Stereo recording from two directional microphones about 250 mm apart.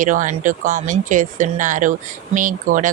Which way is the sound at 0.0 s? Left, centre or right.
Right.